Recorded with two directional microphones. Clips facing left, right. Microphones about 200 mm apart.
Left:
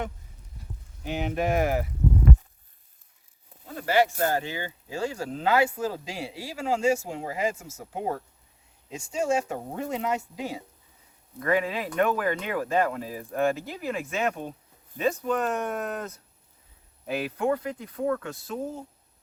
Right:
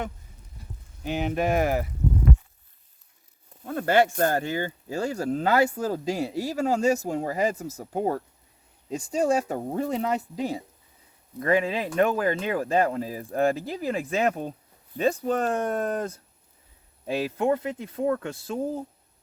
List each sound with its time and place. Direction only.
1.0 s speech: 30° right (ahead or behind)
3.6 s speech: 55° right (ahead or behind); by 18.5 s 25° right (ahead or behind)